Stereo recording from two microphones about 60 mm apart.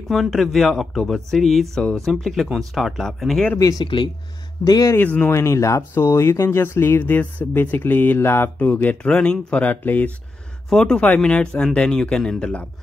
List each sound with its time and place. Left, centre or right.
0.1 s speech: centre
3.5 s speech: left
4.6 s speech: left
5.0 s speech: left
5.3 s speech: left
5.9 s speech: left
8.2 s speech: left
8.5 s speech: left
9.0 s speech: centre
10.7 s speech: centre
12.4 s speech: centre